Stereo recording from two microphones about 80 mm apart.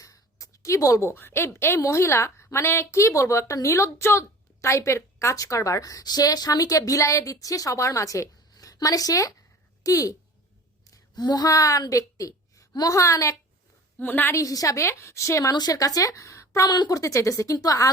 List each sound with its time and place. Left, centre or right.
0.0 s a sound: left
1.1 s a woman's voice: left
10.9 s a woman's voice: left
14.0 s a woman's voice: left
14.3 s a woman's voice: left
16.6 s a woman's voice: left
16.9 s speech: left